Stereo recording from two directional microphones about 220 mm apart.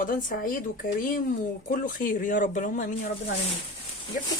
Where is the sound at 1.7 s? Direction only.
40° left (ahead or behind).